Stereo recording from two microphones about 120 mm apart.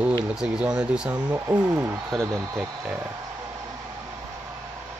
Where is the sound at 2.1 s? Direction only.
25° right (ahead or behind).